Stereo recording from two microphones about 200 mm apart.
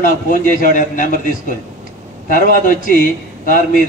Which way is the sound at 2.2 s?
40° left (ahead or behind).